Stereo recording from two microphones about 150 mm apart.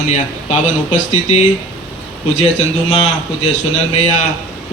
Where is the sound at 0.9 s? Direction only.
55° left (ahead or behind).